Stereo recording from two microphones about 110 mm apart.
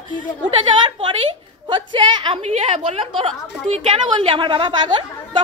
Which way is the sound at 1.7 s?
45° right (ahead or behind).